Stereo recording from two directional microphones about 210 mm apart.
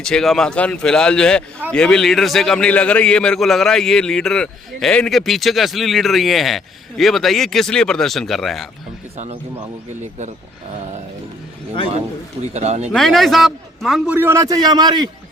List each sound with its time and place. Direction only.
0.0 s a man's voice: centre (ahead or behind)
9.1 s speech: 35° right (ahead or behind)
12.5 s speech: 30° right (ahead or behind)
12.9 s a man's voice: centre (ahead or behind); by 15.1 s 20° right (ahead or behind)